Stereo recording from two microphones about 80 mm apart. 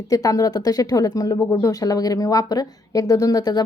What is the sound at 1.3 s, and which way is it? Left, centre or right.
A woman's voice, left.